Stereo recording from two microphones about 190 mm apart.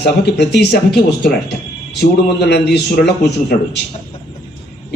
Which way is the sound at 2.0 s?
60° left (ahead or behind).